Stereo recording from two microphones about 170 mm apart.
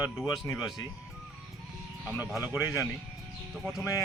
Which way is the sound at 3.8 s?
20° left (ahead or behind).